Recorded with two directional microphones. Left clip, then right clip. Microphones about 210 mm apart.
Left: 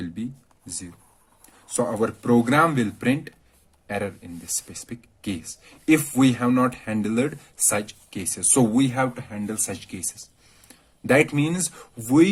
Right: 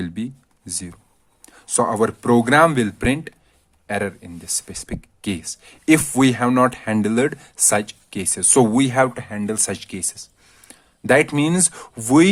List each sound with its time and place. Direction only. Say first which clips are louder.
0.0 s speech: right 4 dB; 40° right (ahead or behind)